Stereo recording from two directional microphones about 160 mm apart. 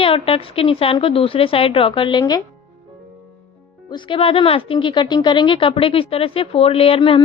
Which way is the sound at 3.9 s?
30° left (ahead or behind).